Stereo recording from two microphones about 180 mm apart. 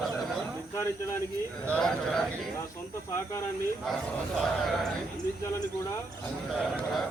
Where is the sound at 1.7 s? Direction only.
5° left (ahead or behind).